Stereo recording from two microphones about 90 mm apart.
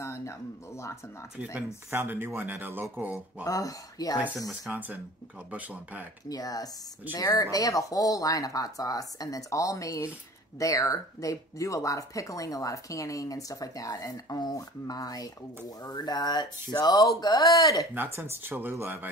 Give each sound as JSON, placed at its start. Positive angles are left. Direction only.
{"t": 0.0, "sound": "a sound", "side_deg": 30}
{"t": 1.9, "sound": "speech", "side_deg": -20}
{"t": 3.4, "sound": "speech", "side_deg": 40}
{"t": 4.7, "sound": "speech", "side_deg": -20}
{"t": 6.2, "sound": "speech", "side_deg": 45}
{"t": 17.9, "sound": "speech", "side_deg": -25}